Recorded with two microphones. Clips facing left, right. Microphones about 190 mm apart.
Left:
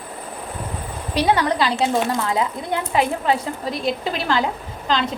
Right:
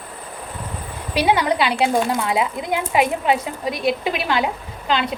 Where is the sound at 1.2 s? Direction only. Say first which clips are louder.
Right 1 dB; 10° right (ahead or behind).